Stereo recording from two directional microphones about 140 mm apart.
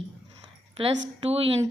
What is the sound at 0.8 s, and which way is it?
Speech, 40° right (ahead or behind).